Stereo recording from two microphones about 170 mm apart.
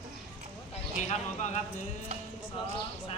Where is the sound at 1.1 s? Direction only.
40° left (ahead or behind).